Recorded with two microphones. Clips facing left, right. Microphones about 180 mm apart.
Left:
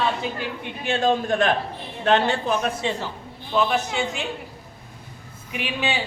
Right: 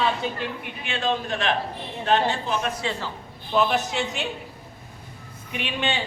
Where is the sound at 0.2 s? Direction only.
Centre (ahead or behind).